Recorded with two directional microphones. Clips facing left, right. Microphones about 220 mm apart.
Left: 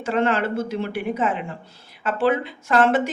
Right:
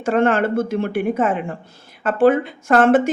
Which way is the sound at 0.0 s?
50° right (ahead or behind).